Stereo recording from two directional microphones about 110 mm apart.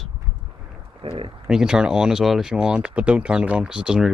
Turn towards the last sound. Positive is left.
turn(degrees=-5)  # may be behind; listen again after turning